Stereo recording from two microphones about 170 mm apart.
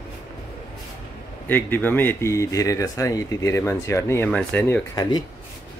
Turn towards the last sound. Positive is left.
turn(degrees=25)  # may be behind; listen again after turning